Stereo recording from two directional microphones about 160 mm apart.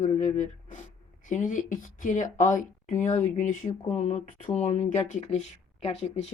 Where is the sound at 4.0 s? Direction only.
45° left (ahead or behind).